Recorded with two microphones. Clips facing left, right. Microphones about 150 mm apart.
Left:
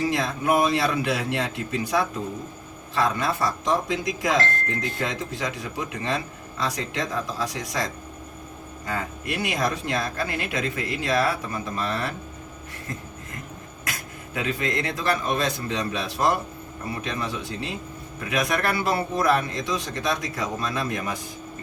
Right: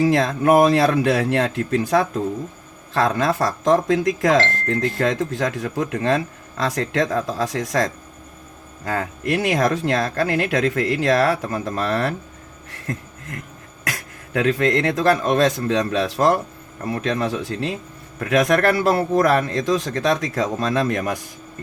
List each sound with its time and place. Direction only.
0.0 s speech: 75° right (ahead or behind)
5.5 s speech: 55° right (ahead or behind); by 7.9 s 75° right (ahead or behind)
8.8 s speech: 65° right (ahead or behind)
12.9 s a sound: 75° right (ahead or behind)
14.3 s speech: 75° right (ahead or behind)
15.7 s speech: 70° right (ahead or behind); by 16.4 s 90° right
16.8 s speech: 70° right (ahead or behind)
18.6 s speech: 85° right; by 21.0 s 70° right (ahead or behind)